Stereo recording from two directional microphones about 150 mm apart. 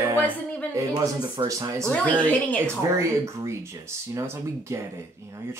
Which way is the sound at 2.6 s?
20° right (ahead or behind).